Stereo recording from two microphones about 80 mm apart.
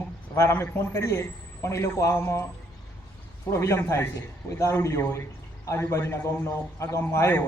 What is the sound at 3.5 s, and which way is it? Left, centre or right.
A man's voice, left.